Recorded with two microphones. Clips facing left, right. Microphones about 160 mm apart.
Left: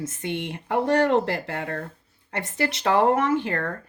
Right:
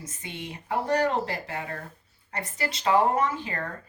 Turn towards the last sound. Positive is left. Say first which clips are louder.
# left 5 dB
turn(degrees=65)  # may be behind; listen again after turning